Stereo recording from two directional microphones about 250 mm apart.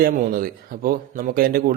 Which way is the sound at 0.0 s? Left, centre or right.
Right.